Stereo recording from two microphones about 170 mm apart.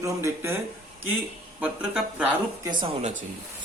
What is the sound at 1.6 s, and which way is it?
Speech, 5° right (ahead or behind).